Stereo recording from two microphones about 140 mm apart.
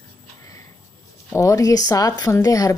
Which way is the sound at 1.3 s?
25° left (ahead or behind).